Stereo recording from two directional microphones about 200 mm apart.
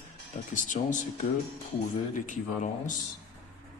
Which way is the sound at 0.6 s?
40° left (ahead or behind).